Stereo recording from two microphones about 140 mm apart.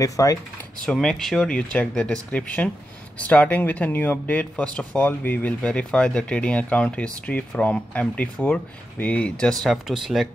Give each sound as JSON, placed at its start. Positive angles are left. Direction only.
{"t": 0.0, "sound": "speech", "side_deg": 25}
{"t": 0.8, "sound": "speech", "side_deg": 0}